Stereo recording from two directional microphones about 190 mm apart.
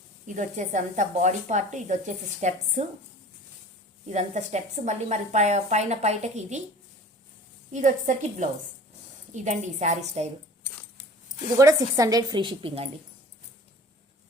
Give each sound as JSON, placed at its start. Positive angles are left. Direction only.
{"t": 0.3, "sound": "speech", "side_deg": -40}
{"t": 4.1, "sound": "speech", "side_deg": -35}
{"t": 7.7, "sound": "speech", "side_deg": -40}
{"t": 11.5, "sound": "a woman's voice", "side_deg": -15}